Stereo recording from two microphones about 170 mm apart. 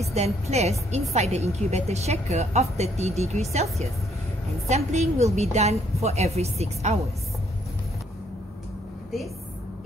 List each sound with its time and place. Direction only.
0.1 s a woman's voice: 40° right (ahead or behind)
4.6 s a woman's voice: 40° right (ahead or behind)